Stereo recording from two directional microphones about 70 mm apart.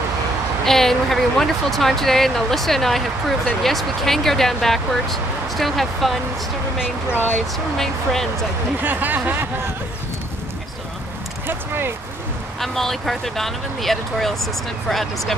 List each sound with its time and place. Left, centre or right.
0.7 s speech: centre
7.1 s speech: left
7.7 s speech: centre
8.8 s speech: right
11.4 s a sound: right
12.5 s speech: centre